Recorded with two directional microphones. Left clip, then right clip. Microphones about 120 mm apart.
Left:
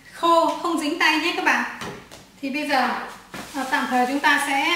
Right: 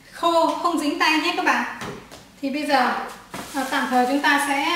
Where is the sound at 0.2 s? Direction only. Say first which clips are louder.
Left 2 dB; centre (ahead or behind).